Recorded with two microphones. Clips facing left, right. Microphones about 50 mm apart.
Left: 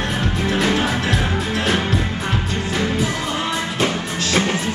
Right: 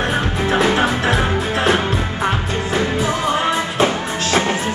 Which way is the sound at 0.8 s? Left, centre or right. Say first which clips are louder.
Right 3 dB; right.